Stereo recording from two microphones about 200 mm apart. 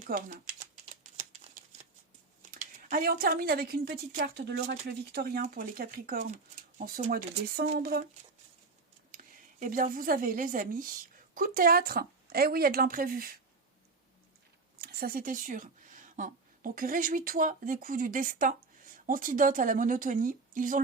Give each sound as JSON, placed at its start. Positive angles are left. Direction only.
{"t": 0.1, "sound": "speech", "side_deg": -45}
{"t": 2.5, "sound": "speech", "side_deg": -40}
{"t": 9.1, "sound": "speech", "side_deg": -45}
{"t": 14.8, "sound": "a woman's voice", "side_deg": -50}